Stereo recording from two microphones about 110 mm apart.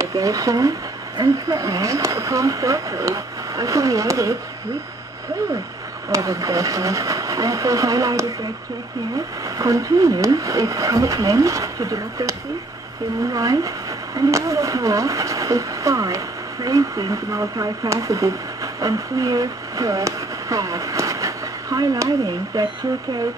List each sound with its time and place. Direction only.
0.0 s speech: 30° right (ahead or behind)
6.0 s speech: 30° right (ahead or behind)